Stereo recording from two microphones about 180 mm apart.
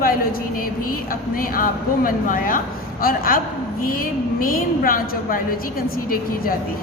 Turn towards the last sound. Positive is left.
turn(degrees=50)  # may be behind; listen again after turning